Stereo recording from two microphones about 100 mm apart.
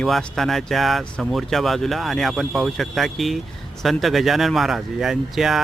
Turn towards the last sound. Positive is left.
turn(degrees=-5)  # may be behind; listen again after turning